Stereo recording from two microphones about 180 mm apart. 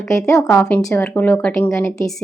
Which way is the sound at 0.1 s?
5° left (ahead or behind).